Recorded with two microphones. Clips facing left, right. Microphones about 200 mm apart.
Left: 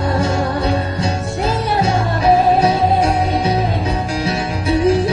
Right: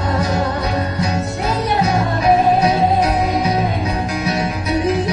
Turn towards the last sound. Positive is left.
turn(degrees=30)  # may be behind; listen again after turning